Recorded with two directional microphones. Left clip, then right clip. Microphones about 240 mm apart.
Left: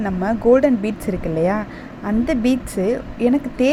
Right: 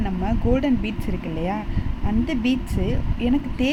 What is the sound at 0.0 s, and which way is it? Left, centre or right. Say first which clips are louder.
Speech: left 7 dB; centre.